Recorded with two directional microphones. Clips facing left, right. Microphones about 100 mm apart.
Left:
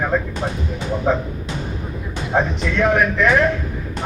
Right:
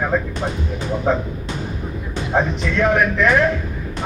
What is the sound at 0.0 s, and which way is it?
A man's voice, centre (ahead or behind).